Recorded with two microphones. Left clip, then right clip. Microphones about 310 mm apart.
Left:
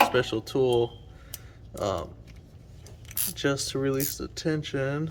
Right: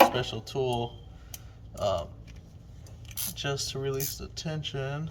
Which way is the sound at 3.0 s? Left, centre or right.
Centre.